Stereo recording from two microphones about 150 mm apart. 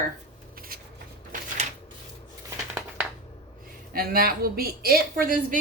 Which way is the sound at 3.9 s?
85° right.